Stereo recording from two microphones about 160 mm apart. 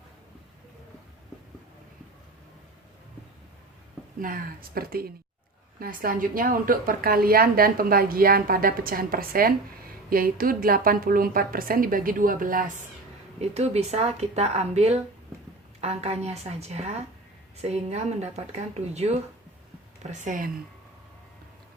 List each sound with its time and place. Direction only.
4.2 s speech: 60° right (ahead or behind)
13.4 s speech: 40° right (ahead or behind)